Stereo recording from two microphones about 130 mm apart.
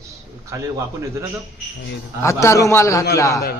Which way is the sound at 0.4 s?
25° right (ahead or behind).